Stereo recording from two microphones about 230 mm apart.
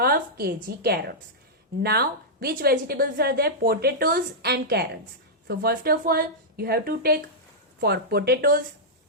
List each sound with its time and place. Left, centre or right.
0.0 s a woman's voice: right